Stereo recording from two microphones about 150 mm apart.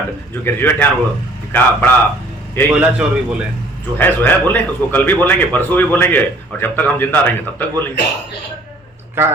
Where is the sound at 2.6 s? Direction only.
15° left (ahead or behind).